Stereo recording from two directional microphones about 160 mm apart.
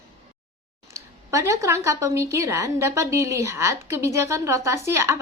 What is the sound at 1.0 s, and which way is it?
A woman's voice, 20° right (ahead or behind).